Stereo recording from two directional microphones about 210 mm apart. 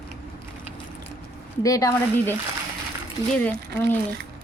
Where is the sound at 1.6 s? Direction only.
15° left (ahead or behind).